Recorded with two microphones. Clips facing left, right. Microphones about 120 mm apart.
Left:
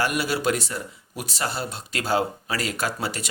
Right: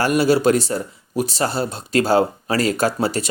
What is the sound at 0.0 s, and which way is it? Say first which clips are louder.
Speech: right 8 dB; 35° right (ahead or behind).